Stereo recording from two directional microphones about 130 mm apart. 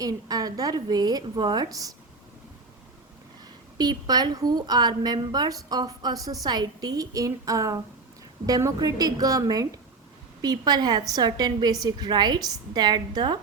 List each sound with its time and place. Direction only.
0.0 s a woman's voice: 30° right (ahead or behind)
3.8 s a woman's voice: 30° right (ahead or behind)